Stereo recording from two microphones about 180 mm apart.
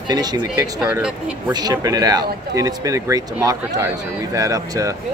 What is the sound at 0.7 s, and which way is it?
Speech, 5° right (ahead or behind).